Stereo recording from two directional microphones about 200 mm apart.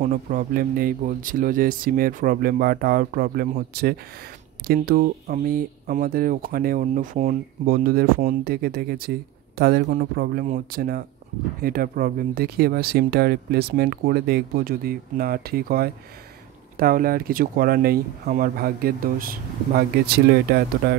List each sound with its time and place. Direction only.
0.0 s speech: 40° right (ahead or behind)